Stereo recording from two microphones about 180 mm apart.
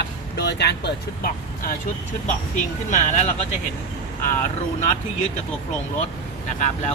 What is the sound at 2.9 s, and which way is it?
Speech, 40° left (ahead or behind).